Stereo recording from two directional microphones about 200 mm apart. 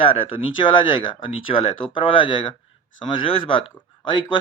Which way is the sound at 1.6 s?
25° left (ahead or behind).